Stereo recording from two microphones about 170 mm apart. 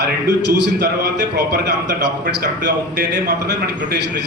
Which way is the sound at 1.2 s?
80° right.